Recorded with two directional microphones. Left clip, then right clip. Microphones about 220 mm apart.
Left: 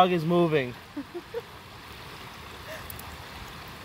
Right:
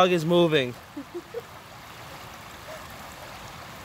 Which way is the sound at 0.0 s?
25° right (ahead or behind).